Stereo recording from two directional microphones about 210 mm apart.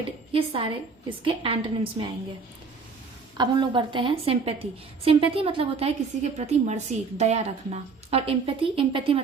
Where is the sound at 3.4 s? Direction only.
20° right (ahead or behind).